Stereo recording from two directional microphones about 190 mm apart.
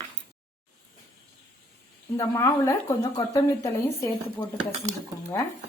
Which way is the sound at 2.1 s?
15° left (ahead or behind).